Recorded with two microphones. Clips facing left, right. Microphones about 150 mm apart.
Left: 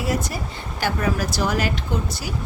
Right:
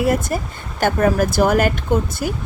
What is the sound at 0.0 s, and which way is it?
Speech, 55° right (ahead or behind).